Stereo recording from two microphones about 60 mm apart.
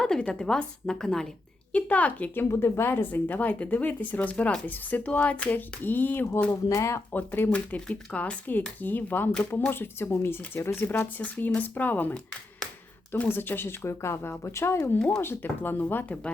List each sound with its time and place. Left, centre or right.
0.0 s a sound: centre
0.3 s a woman's voice: centre
1.7 s speech: left
2.3 s speech: left
6.5 s speech: left
7.1 s speech: left
7.5 s speech: left
10.8 s speech: left
13.2 s speech: left